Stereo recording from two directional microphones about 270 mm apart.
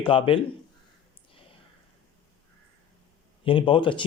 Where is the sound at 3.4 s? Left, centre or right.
Centre.